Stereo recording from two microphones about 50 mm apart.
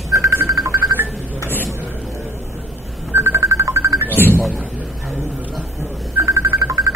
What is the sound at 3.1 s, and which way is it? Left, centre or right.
Music, right.